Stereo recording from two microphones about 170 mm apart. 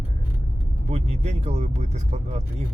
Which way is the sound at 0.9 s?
40° right (ahead or behind).